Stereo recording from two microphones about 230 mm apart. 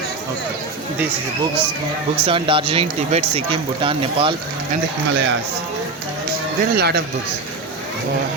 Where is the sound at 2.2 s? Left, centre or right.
Right.